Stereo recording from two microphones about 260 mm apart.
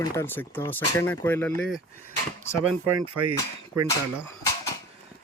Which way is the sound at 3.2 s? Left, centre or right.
Right.